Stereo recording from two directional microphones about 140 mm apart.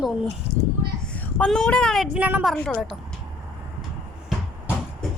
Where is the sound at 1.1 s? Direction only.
10° left (ahead or behind); by 2.5 s 10° right (ahead or behind).